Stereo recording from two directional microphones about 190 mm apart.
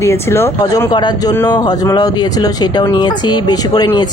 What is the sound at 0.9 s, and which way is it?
Speech, 25° left (ahead or behind).